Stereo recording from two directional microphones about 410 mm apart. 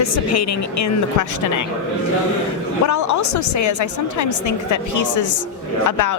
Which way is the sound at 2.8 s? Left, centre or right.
Left.